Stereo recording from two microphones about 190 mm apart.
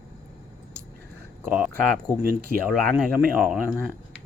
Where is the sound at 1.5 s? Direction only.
5° right (ahead or behind).